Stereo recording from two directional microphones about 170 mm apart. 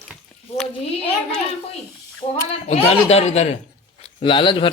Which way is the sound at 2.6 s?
40° left (ahead or behind).